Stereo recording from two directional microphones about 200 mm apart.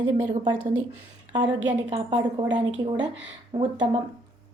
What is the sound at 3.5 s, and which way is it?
Speech, 20° right (ahead or behind).